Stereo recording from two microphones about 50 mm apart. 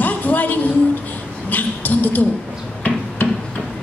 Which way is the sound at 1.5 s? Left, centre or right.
Left.